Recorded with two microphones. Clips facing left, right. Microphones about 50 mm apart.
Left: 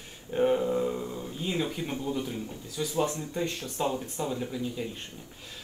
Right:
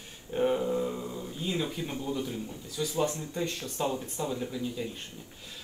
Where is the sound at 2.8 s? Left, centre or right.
Centre.